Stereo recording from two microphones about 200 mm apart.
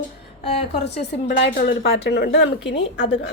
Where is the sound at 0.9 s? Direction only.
60° left (ahead or behind).